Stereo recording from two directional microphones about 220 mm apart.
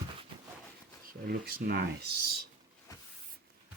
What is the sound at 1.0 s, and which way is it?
Speech, 45° right (ahead or behind).